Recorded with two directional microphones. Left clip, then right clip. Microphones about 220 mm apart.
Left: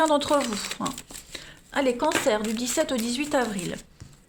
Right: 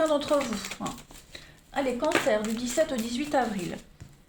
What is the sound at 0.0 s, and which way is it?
Speech, 45° left (ahead or behind).